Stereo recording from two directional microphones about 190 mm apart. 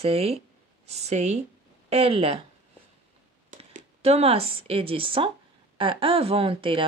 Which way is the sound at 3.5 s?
35° right (ahead or behind).